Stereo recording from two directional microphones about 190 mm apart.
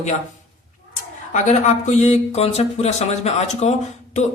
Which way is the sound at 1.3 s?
40° left (ahead or behind).